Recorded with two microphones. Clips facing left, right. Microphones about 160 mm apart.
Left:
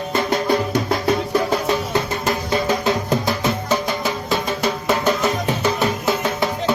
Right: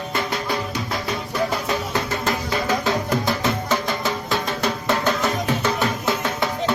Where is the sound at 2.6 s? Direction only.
20° left (ahead or behind).